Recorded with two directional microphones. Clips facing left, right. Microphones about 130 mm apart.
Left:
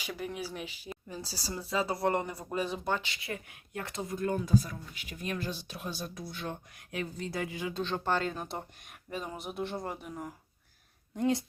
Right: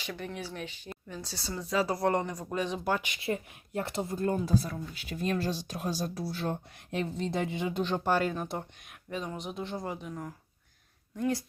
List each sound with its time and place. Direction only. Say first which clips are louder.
0.0 s speech: left 1 dB; 10° left (ahead or behind)
1.2 s speech: even; 35° left (ahead or behind)
1.5 s speech: right 3 dB; 5° left (ahead or behind)
3.2 s speech: right 7 dB; 25° right (ahead or behind); by 8.3 s 10° right (ahead or behind)
8.3 s speech: right 3 dB; centre (ahead or behind)
11.2 s a woman's voice: left 1 dB; 20° left (ahead or behind)